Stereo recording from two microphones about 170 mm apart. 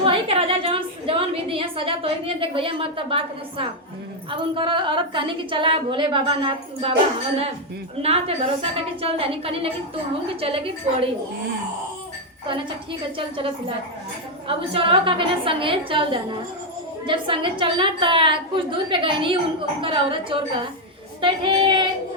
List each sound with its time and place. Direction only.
0.0 s a sound: 35° right (ahead or behind)
4.3 s a woman's voice: 30° right (ahead or behind)
8.0 s a woman's voice: 35° right (ahead or behind)
13.1 s a woman's voice: 30° right (ahead or behind)